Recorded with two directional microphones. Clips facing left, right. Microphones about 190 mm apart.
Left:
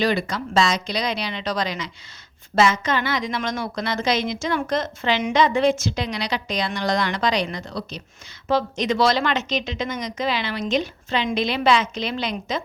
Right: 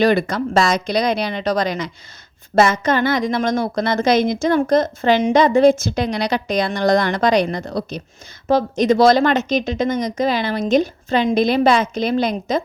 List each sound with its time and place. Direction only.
0.0 s speech: 55° right (ahead or behind)